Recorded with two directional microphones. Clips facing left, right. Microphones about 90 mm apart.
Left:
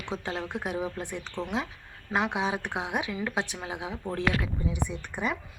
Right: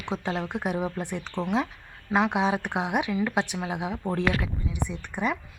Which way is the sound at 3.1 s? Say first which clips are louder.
Right 5 dB; 5° right (ahead or behind).